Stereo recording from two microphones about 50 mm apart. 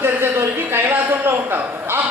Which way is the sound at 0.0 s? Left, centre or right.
Right.